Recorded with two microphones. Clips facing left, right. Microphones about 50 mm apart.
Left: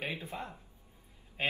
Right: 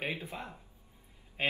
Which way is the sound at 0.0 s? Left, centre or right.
Right.